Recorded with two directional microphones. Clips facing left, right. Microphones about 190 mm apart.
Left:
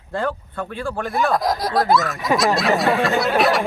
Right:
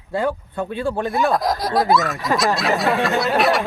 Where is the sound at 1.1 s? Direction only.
Centre (ahead or behind).